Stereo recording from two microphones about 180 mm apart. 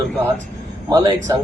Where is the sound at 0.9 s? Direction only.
20° right (ahead or behind).